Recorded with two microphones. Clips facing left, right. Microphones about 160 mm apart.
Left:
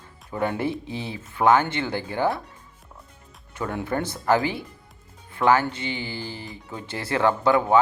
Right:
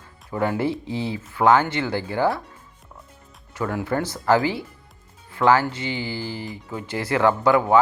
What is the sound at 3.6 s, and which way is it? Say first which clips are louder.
Speech: right 2 dB; 25° left (ahead or behind).